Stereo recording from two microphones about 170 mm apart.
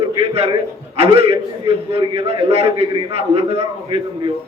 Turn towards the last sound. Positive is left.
turn(degrees=-35)  # may be behind; listen again after turning